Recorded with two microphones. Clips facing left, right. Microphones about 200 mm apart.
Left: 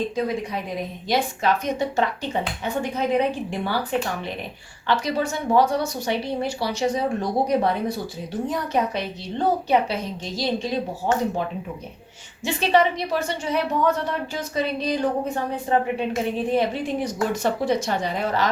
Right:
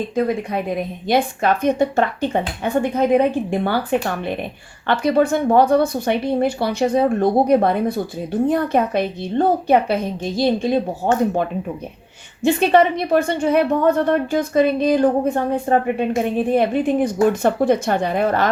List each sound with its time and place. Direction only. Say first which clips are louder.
1.0 s a woman's voice: right 4 dB; 55° right (ahead or behind)